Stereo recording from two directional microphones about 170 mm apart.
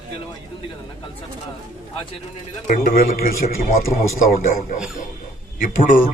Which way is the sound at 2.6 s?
55° left (ahead or behind).